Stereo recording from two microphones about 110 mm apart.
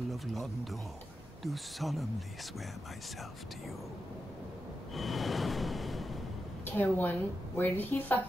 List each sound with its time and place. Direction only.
0.1 s speech: centre (ahead or behind)
4.9 s a sound: centre (ahead or behind)
6.6 s a woman's voice: 15° left (ahead or behind)